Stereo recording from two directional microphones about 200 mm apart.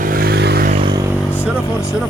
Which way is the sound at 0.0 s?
45° right (ahead or behind).